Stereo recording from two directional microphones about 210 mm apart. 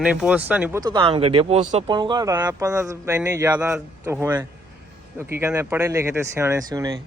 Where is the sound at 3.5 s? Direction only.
5° right (ahead or behind).